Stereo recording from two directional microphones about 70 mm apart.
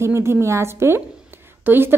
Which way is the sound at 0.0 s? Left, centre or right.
Right.